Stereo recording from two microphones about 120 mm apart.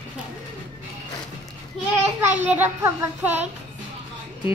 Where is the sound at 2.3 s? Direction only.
15° right (ahead or behind).